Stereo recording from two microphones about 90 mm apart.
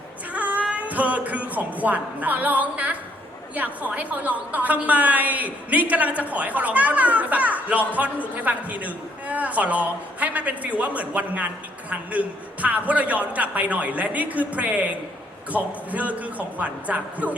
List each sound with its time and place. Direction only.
0.3 s a woman's voice: 15° right (ahead or behind)